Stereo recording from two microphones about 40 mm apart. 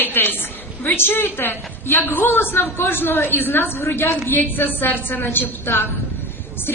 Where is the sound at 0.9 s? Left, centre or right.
Left.